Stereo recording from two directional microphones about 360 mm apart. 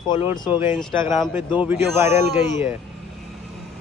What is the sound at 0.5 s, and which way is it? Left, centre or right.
Speech, centre.